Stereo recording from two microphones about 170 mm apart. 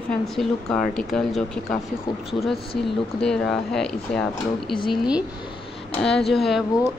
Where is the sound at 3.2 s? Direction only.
5° left (ahead or behind).